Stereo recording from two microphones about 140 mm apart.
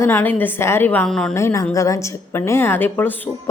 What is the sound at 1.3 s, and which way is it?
A woman's voice, 20° left (ahead or behind).